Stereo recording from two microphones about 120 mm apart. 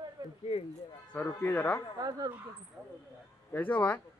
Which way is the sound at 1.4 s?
15° left (ahead or behind).